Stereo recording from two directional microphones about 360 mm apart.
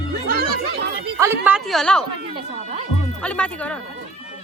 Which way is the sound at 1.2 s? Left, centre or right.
Centre.